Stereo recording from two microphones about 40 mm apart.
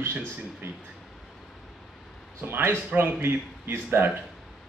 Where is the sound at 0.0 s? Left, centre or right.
Right.